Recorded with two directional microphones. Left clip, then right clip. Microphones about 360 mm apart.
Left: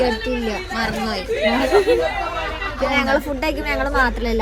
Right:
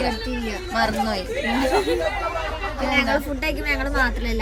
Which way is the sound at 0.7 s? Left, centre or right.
Centre.